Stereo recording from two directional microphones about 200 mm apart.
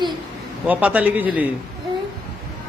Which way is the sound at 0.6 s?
5° right (ahead or behind).